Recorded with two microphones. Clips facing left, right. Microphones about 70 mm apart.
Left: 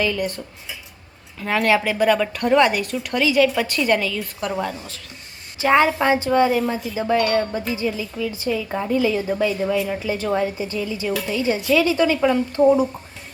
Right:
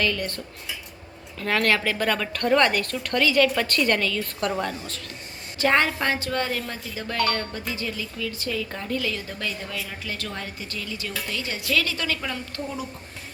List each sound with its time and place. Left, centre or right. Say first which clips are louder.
0.0 s speech: left 4 dB; centre